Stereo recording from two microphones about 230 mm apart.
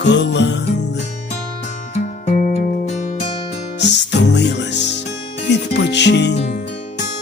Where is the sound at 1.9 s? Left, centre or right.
Left.